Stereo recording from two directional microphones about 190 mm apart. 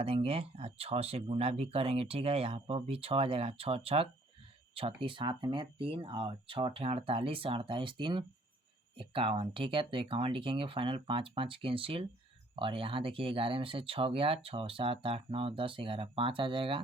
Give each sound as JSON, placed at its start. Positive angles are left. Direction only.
{"t": 0.0, "sound": "speech", "side_deg": -30}